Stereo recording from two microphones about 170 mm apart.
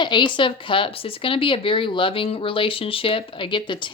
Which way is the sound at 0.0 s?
25° left (ahead or behind).